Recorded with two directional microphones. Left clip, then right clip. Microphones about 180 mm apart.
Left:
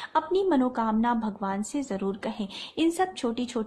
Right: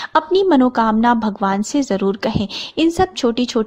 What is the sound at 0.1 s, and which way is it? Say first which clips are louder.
A woman's voice: right 10 dB; 40° right (ahead or behind).